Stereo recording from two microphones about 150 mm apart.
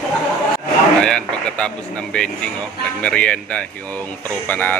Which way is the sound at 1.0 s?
5° left (ahead or behind).